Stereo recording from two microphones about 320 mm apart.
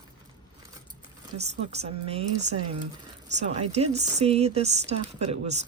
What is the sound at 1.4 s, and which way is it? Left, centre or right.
Speech, centre.